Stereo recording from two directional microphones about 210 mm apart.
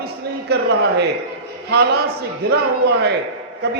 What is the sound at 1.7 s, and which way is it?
Speech, 50° right (ahead or behind).